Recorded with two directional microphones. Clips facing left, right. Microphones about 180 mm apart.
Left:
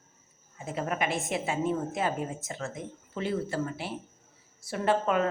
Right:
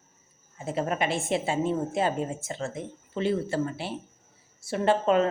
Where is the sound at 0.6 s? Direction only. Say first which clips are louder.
Right 3 dB; 30° right (ahead or behind).